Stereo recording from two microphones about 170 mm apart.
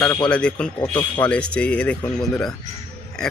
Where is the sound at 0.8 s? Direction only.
30° left (ahead or behind).